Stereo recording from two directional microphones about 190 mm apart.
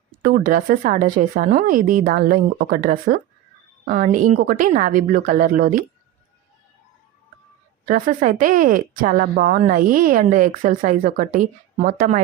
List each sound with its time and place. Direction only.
0.2 s speech: 50° right (ahead or behind)
7.9 s speech: 45° right (ahead or behind)